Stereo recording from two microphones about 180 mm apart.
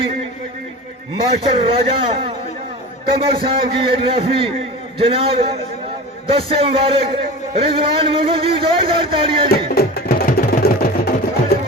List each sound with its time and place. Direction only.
1.7 s a man's voice: 30° right (ahead or behind)
9.5 s music: 60° left (ahead or behind)